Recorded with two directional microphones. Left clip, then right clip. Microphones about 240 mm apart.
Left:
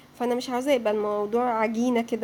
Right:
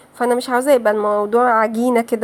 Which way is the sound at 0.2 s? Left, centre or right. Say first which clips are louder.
Right 10 dB; centre.